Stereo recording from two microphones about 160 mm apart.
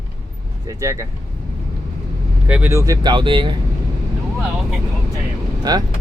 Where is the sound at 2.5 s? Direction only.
10° right (ahead or behind); by 3.5 s 30° right (ahead or behind).